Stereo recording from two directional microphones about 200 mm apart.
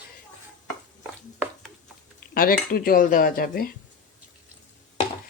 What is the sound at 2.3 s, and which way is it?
Speech, 50° left (ahead or behind).